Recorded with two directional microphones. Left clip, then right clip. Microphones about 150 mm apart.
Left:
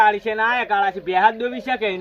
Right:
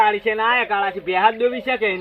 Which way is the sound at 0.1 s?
30° left (ahead or behind).